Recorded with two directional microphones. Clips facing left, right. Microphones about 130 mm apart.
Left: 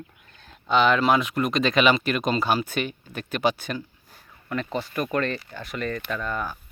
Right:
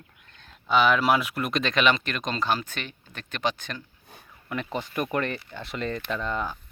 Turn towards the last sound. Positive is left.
turn(degrees=-20)  # may be behind; listen again after turning